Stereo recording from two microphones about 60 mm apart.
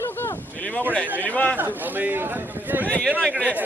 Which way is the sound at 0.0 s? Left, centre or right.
Left.